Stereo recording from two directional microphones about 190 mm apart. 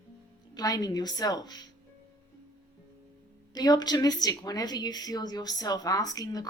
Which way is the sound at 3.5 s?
20° left (ahead or behind).